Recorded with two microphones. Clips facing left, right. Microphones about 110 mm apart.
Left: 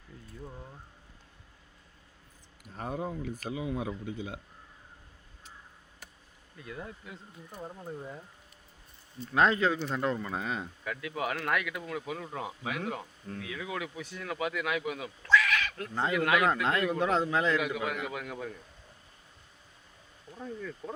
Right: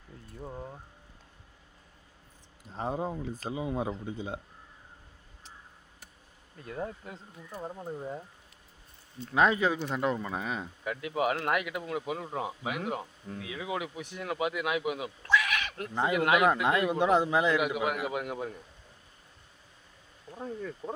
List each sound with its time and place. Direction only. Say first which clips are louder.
0.4 s speech: right 6 dB; 30° right (ahead or behind)
2.6 s speech: right 3 dB; 25° right (ahead or behind)
6.6 s speech: right 5 dB; 40° right (ahead or behind)
7.7 s speech: right 4 dB; 20° right (ahead or behind)
9.3 s speech: even; 5° right (ahead or behind)
10.8 s speech: right 5 dB; 20° right (ahead or behind)
15.3 s a sound: left 2 dB; 15° right (ahead or behind)
16.2 s speech: right 3 dB; 20° right (ahead or behind)
20.4 s speech: right 2 dB; 30° right (ahead or behind)